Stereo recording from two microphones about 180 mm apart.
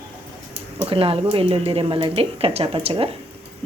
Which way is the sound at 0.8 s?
30° right (ahead or behind).